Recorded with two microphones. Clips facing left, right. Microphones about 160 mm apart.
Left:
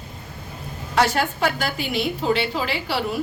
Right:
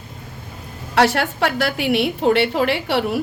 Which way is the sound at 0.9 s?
75° right (ahead or behind).